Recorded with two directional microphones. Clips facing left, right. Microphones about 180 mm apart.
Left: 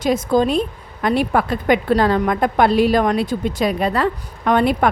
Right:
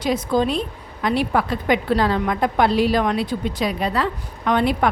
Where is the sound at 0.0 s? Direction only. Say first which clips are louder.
Left 3 dB; 45° left (ahead or behind).